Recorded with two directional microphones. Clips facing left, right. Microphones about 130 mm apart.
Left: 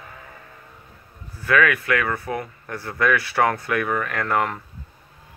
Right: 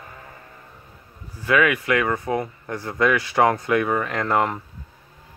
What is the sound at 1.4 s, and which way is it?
Speech, 15° right (ahead or behind).